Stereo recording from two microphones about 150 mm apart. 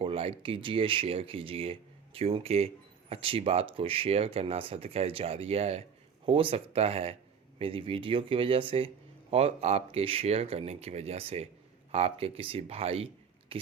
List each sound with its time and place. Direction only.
0.0 s speech: 40° right (ahead or behind)